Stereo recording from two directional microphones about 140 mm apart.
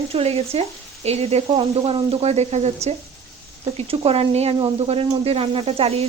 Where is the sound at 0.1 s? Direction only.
45° right (ahead or behind).